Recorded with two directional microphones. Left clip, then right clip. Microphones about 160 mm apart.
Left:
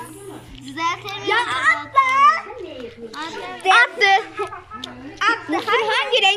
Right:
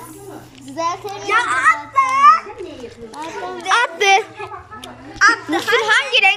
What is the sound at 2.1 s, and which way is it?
Children playing, 35° left (ahead or behind).